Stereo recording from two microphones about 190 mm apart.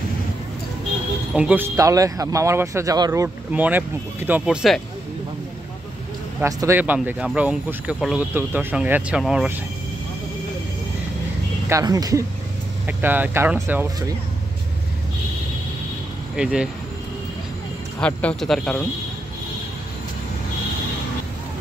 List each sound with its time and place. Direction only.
1.3 s speech: 5° right (ahead or behind)
6.4 s speech: 15° right (ahead or behind)
11.7 s speech: 20° right (ahead or behind)
16.3 s speech: 5° right (ahead or behind)
18.0 s speech: 5° left (ahead or behind)